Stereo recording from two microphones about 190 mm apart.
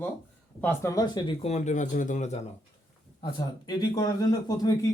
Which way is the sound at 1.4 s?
35° left (ahead or behind).